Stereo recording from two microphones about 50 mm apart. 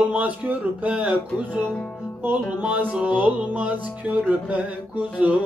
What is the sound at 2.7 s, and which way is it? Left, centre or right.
Speech, right.